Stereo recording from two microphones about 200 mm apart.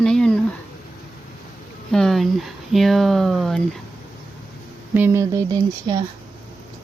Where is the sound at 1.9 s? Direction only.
Centre (ahead or behind).